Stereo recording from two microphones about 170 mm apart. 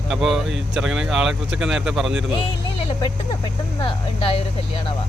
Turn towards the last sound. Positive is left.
turn(degrees=30)  # may be behind; listen again after turning